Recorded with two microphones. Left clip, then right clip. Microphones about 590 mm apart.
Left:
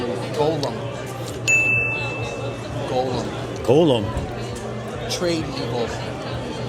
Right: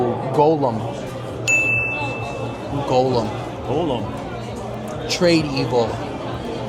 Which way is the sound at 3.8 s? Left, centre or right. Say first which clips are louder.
Left 4 dB; left.